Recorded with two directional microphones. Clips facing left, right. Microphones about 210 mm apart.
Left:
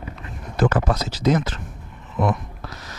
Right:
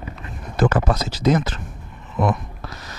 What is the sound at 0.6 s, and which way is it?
Speech, 20° right (ahead or behind).